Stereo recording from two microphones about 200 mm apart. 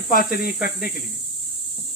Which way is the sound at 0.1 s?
45° left (ahead or behind).